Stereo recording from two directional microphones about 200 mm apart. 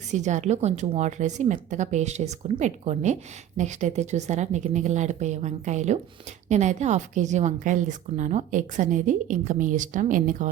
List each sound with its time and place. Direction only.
0.1 s a woman's voice: 35° right (ahead or behind)